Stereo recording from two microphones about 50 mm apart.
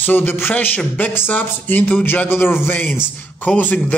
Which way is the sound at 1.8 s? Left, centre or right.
Left.